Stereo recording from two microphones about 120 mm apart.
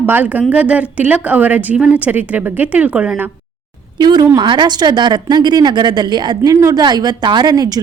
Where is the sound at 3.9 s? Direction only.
35° right (ahead or behind).